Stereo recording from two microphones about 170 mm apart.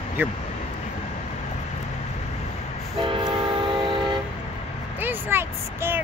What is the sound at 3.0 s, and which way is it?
Train, 30° right (ahead or behind).